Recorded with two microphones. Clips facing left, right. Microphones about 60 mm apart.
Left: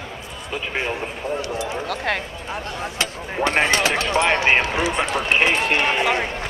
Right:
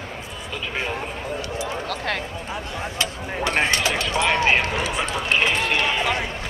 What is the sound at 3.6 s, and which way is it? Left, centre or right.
Speech, left.